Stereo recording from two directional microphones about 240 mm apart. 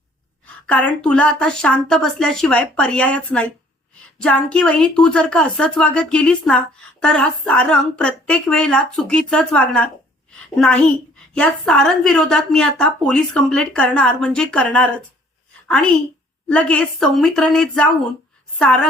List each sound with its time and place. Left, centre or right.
0.4 s a woman's voice: centre